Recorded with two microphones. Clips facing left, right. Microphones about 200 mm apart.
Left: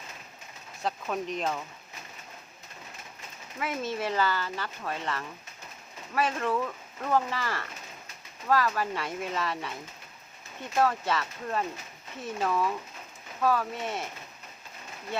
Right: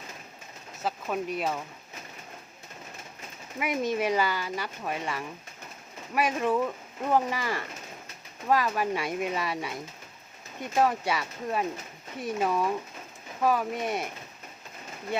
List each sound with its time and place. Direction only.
0.8 s speech: 5° right (ahead or behind)
3.6 s speech: 15° right (ahead or behind)